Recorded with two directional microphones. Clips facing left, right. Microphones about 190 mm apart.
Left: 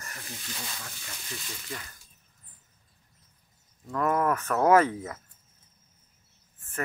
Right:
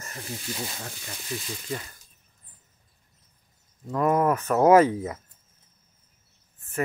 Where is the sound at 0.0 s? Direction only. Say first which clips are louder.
Right 6 dB; 25° right (ahead or behind).